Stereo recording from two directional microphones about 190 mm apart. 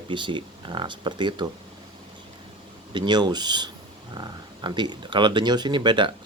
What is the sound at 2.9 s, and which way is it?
Speech, 25° right (ahead or behind).